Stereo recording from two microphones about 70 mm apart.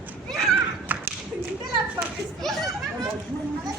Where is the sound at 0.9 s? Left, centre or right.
Right.